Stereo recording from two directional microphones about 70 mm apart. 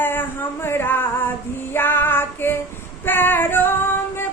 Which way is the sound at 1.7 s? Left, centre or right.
Left.